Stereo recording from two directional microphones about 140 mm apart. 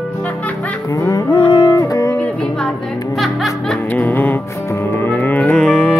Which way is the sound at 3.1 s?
Centre (ahead or behind).